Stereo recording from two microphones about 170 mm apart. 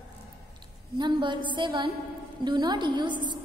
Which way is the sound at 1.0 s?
30° right (ahead or behind).